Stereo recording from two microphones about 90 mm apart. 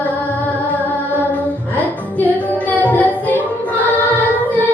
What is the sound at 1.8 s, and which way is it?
Music, 20° left (ahead or behind).